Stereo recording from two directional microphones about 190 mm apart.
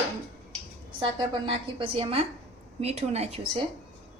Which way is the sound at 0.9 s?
25° right (ahead or behind).